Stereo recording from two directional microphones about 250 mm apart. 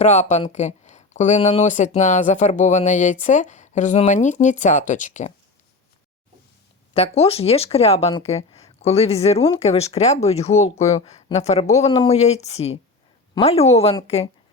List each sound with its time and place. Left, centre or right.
0.0 s speech: left
6.9 s speech: left